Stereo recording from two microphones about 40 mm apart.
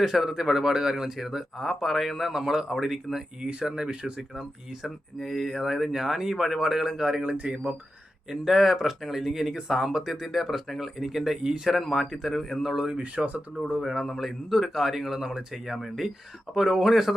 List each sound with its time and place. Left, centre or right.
0.0 s speech: centre
4.4 s speech: centre
7.2 s speech: right
8.3 s speech: centre
12.6 s speech: centre
13.0 s speech: right
13.8 s speech: centre